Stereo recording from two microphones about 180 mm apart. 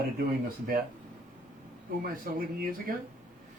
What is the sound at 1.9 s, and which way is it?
Speech, 55° right (ahead or behind).